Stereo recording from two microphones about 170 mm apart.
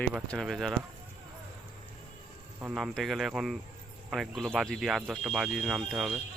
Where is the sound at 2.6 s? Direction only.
5° right (ahead or behind).